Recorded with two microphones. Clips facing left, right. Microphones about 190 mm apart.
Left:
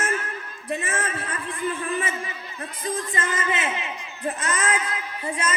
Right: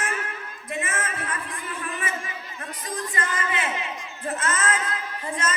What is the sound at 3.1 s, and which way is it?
A man's voice, 25° left (ahead or behind).